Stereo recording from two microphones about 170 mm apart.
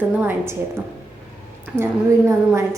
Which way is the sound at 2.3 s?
20° right (ahead or behind).